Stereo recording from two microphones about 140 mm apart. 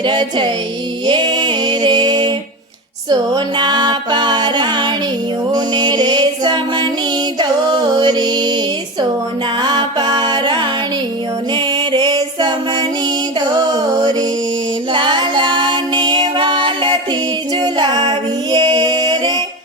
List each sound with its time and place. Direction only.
0.0 s music: 35° right (ahead or behind)
9.6 s music: 35° right (ahead or behind)
13.9 s music: 30° right (ahead or behind)